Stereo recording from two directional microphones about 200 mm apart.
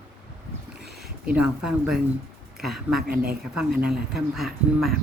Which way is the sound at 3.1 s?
50° right (ahead or behind).